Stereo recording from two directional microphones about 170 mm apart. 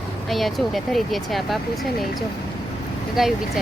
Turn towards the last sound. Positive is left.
turn(degrees=0)  # may be behind; listen again after turning